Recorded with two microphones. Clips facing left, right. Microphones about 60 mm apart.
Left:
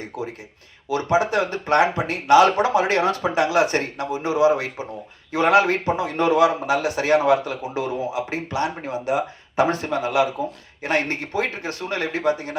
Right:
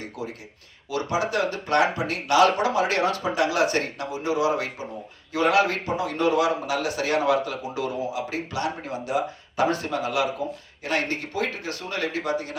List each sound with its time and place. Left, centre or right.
0.1 s a man's voice: left